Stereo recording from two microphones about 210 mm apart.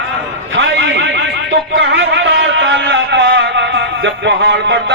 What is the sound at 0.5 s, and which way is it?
Speech, 60° right (ahead or behind).